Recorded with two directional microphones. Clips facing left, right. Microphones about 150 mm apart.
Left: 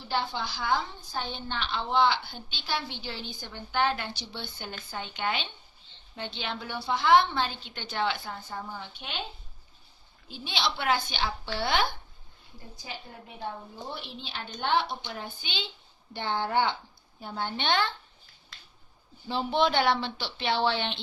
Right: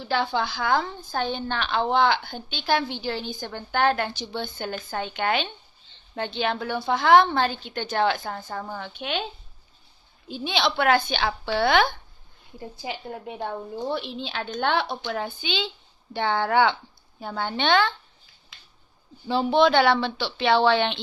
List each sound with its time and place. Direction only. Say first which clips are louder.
0.1 s a woman's voice: right 6 dB; 70° right (ahead or behind)
10.4 s a woman's voice: right 7 dB; 60° right (ahead or behind)
12.8 s a woman's voice: right 9 dB; 80° right
15.0 s a woman's voice: right 10 dB; 90° right
19.2 s speech: right 7 dB; 90° right; by 21.0 s 75° right (ahead or behind)